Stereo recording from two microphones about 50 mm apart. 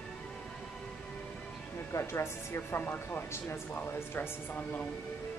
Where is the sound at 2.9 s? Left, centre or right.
Left.